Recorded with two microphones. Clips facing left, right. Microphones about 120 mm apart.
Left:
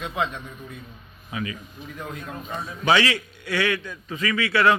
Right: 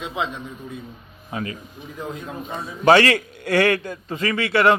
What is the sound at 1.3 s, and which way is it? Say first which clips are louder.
Speech: right 2 dB; 40° right (ahead or behind).